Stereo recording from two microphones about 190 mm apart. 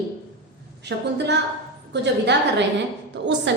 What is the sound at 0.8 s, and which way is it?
A woman's voice, 65° right (ahead or behind).